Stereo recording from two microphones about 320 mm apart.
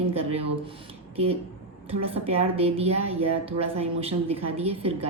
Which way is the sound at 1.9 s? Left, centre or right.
Centre.